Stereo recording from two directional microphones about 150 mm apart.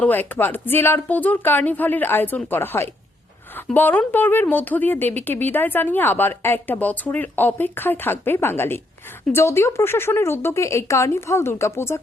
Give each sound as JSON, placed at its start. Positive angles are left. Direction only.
{"t": 0.0, "sound": "speech", "side_deg": 10}